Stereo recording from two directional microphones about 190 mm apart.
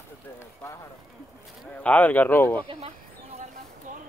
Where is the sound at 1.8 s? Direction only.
10° left (ahead or behind).